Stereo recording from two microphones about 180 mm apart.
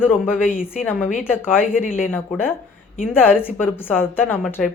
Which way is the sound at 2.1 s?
10° left (ahead or behind).